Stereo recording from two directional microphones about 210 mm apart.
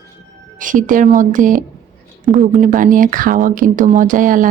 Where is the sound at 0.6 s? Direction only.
40° right (ahead or behind).